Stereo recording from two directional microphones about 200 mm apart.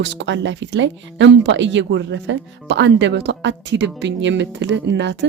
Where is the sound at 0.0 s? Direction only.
60° right (ahead or behind).